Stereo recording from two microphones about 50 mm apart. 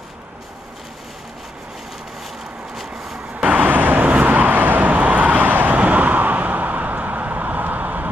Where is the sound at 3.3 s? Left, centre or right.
Right.